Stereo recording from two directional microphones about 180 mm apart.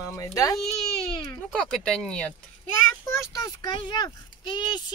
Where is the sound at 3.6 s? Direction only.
25° left (ahead or behind).